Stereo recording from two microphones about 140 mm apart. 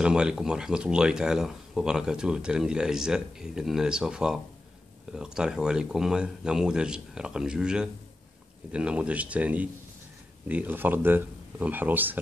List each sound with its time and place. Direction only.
0.0 s speech: 5° right (ahead or behind)